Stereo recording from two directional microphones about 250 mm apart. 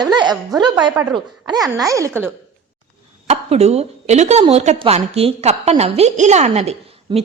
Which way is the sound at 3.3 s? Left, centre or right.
Right.